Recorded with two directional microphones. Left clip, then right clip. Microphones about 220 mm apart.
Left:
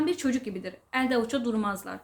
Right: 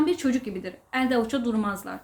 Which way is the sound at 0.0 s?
5° left (ahead or behind).